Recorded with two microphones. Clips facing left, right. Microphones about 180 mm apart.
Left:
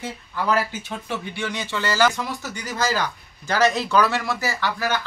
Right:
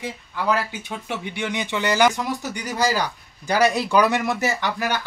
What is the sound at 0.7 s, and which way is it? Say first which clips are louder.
Speech: even; 20° right (ahead or behind).